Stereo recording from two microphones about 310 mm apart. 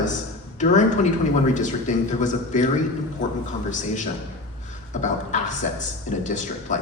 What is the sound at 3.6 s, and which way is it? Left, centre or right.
A man's voice, left.